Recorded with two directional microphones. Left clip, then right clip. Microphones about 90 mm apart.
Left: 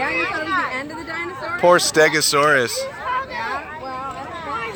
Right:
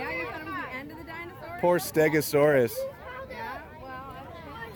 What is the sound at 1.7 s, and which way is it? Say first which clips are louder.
Speech: left 9 dB; 70° right (ahead or behind).